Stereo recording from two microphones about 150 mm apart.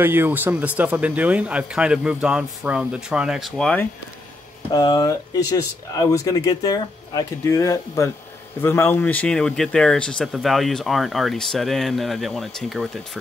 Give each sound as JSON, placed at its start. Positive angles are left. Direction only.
{"t": 0.0, "sound": "speech", "side_deg": -15}
{"t": 4.7, "sound": "speech", "side_deg": 25}